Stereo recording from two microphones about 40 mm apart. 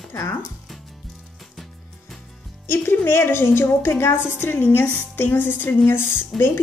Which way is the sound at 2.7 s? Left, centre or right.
Left.